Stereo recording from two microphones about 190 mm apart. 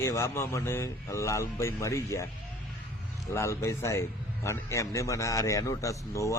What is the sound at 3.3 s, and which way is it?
A man's voice, 15° left (ahead or behind).